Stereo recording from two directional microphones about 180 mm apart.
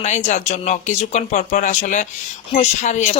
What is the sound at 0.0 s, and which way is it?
Speech, 40° left (ahead or behind).